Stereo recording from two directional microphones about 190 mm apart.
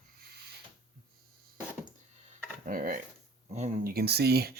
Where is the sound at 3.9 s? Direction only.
55° right (ahead or behind).